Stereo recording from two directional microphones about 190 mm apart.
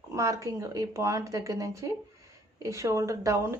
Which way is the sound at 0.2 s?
15° right (ahead or behind).